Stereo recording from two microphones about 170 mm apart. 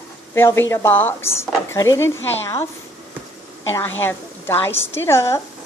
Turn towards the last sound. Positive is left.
turn(degrees=15)  # may be behind; listen again after turning